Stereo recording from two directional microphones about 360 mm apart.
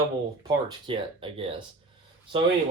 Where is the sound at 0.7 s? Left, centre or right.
Centre.